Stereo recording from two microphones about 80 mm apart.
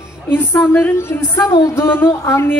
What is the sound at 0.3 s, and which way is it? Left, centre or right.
A woman's voice, left.